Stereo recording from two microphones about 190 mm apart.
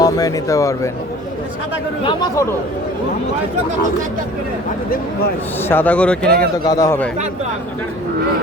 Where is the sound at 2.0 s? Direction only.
15° left (ahead or behind).